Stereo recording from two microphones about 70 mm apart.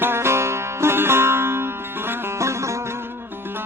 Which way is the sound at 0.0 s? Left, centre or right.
Right.